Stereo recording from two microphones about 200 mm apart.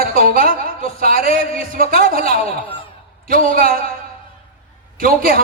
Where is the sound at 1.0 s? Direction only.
45° right (ahead or behind).